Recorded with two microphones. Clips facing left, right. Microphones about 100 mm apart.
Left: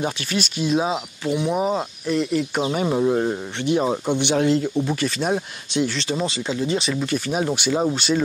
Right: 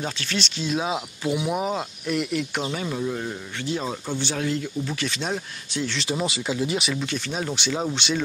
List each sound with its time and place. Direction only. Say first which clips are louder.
0.0 s speech: left 4 dB; 10° left (ahead or behind)
0.9 s speech: left 2 dB; 10° right (ahead or behind)
2.8 s speech: left 8 dB; 35° left (ahead or behind)
3.7 s speech: left 8 dB; 20° left (ahead or behind)
4.9 s speech: left 5 dB; 5° left (ahead or behind)
5.3 s speech: left 6 dB; 20° left (ahead or behind)
5.9 s speech: left 2 dB; 10° right (ahead or behind)
6.9 s speech: left 5 dB; 5° left (ahead or behind)